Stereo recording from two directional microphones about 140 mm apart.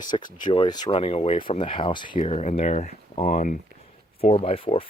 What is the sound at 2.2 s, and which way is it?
Speech, 50° left (ahead or behind).